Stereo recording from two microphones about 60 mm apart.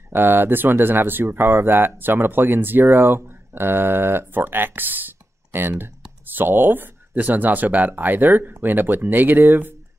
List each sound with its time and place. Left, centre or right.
0.1 s speech: right